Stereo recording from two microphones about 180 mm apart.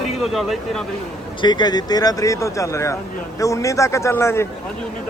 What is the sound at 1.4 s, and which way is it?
Speech, 25° left (ahead or behind).